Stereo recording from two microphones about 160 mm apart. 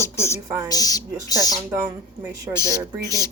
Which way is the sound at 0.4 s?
20° right (ahead or behind).